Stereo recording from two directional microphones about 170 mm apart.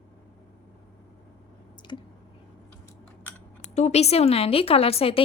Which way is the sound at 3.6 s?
40° left (ahead or behind).